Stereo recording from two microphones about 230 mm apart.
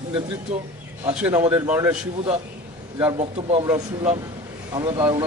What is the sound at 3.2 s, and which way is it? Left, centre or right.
Speech, right.